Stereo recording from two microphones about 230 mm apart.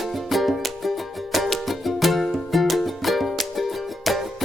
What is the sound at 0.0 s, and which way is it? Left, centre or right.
Music, centre.